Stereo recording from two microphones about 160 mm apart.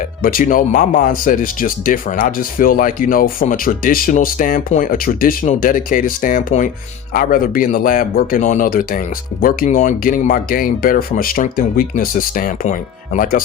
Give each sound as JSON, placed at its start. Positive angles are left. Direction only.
{"t": 0.0, "sound": "speech", "side_deg": 60}